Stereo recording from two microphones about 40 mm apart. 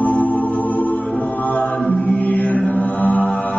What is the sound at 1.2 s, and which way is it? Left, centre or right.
A capella, left.